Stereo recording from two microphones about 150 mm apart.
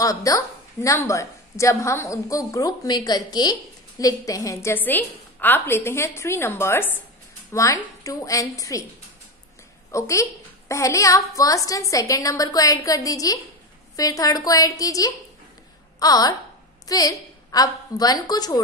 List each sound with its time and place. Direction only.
0.0 s a woman's voice: 25° left (ahead or behind)
9.8 s a woman's voice: 20° left (ahead or behind)